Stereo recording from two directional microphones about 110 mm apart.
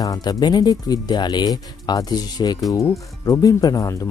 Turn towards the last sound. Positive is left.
turn(degrees=35)  # may be behind; listen again after turning